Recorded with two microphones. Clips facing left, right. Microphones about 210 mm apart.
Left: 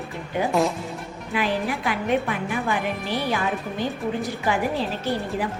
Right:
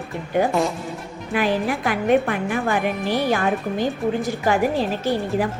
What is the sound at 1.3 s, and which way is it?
A woman's voice, 50° right (ahead or behind).